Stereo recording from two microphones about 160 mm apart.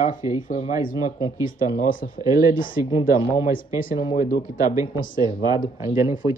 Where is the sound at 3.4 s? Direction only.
60° left (ahead or behind).